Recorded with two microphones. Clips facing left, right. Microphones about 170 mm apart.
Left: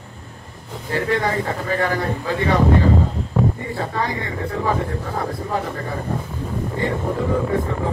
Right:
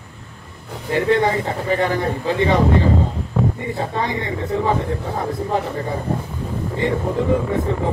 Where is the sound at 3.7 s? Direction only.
20° right (ahead or behind).